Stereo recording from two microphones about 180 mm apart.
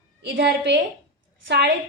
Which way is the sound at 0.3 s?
75° right (ahead or behind).